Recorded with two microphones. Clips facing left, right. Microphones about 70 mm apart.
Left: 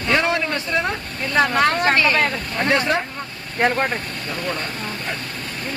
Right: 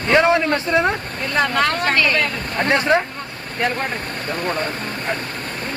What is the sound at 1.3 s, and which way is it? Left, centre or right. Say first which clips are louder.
Speech: left 1 dB; centre.